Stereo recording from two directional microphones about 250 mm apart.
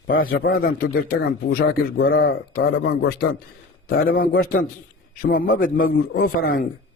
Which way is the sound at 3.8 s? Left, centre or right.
Left.